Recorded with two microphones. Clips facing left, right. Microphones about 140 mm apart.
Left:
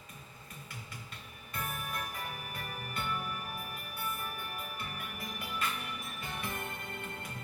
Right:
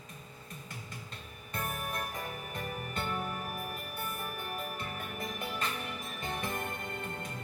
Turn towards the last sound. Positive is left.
turn(degrees=-45)  # may be behind; listen again after turning